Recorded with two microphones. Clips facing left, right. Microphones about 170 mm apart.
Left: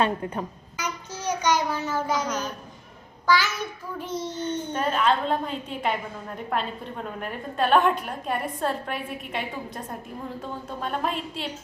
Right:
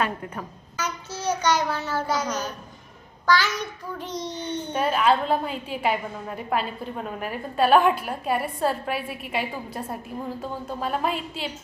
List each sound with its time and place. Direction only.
0.0 s a woman's voice: 30° left (ahead or behind)
0.8 s a child's voice: 10° left (ahead or behind)
2.2 s a woman's voice: 10° right (ahead or behind)
3.2 s child singing: 10° left (ahead or behind)
4.7 s a woman's voice: 10° right (ahead or behind)